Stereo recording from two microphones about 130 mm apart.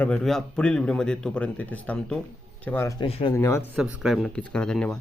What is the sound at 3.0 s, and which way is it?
Speech, 40° left (ahead or behind).